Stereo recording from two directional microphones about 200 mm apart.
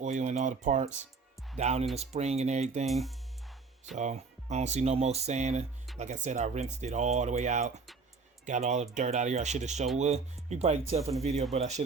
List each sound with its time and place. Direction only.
0.0 s speech: 35° right (ahead or behind)
2.8 s speech: centre (ahead or behind)
3.9 s speech: 35° right (ahead or behind)